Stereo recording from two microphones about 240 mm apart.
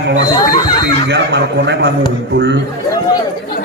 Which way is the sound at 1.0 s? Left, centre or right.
Right.